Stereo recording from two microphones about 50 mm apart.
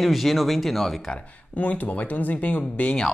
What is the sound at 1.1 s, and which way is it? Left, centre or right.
Speech, left.